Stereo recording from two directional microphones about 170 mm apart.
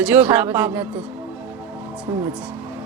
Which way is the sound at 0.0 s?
10° right (ahead or behind).